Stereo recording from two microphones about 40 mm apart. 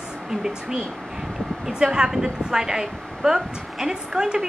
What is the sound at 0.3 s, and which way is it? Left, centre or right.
A woman's voice, centre.